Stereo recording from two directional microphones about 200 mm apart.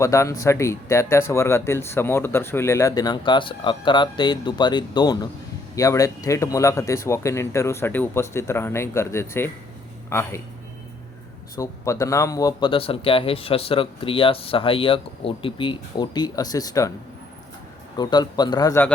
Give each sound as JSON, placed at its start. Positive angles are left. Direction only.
{"t": 0.0, "sound": "speech", "side_deg": 15}
{"t": 11.5, "sound": "speech", "side_deg": 15}
{"t": 17.9, "sound": "speech", "side_deg": 20}